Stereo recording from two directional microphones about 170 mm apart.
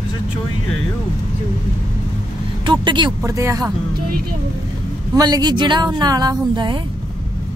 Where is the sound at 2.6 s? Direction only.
30° right (ahead or behind).